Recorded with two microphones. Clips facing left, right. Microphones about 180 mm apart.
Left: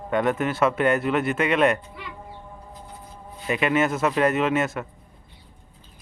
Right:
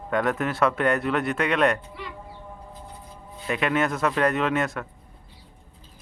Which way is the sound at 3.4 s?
5° left (ahead or behind).